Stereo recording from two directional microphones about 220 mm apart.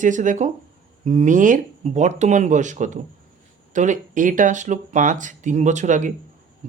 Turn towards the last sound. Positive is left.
turn(degrees=-35)  # may be behind; listen again after turning